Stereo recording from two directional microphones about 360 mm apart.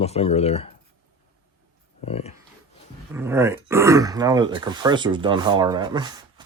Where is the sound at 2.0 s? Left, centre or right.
Centre.